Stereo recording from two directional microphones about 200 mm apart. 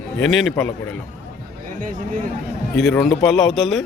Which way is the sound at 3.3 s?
Centre (ahead or behind).